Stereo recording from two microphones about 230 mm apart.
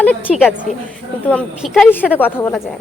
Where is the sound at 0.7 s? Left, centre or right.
Left.